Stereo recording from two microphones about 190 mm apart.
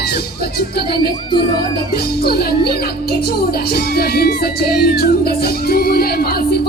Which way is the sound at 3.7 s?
55° left (ahead or behind).